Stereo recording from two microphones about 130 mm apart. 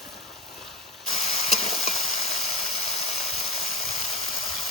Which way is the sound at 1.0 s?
55° left (ahead or behind).